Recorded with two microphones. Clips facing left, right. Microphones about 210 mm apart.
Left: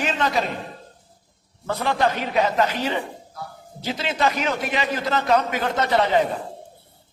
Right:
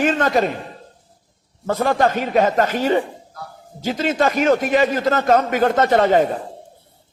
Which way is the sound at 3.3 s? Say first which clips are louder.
Even; centre (ahead or behind).